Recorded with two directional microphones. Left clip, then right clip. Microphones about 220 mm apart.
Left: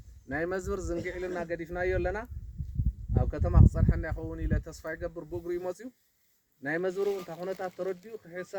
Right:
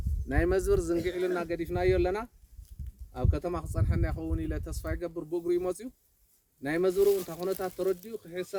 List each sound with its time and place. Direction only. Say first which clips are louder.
0.3 s speech: right 5 dB; 35° right (ahead or behind)